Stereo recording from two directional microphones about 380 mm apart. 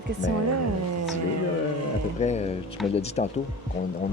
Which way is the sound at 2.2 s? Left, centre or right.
Centre.